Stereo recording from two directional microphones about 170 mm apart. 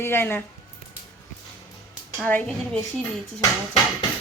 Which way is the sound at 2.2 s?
5° left (ahead or behind).